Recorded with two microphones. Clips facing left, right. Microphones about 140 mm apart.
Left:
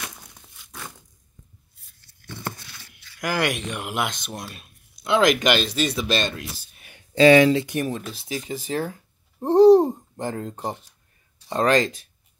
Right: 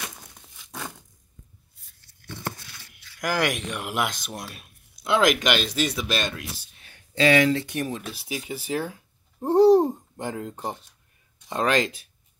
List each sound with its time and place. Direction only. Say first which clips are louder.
3.2 s speech: left 1 dB; centre (ahead or behind)
7.2 s speech: left 6 dB; 30° left (ahead or behind)
7.5 s speech: left 4 dB; 5° left (ahead or behind)
8.1 s speech: left 2 dB; 10° right (ahead or behind)
11.5 s speech: left 3 dB; 5° right (ahead or behind)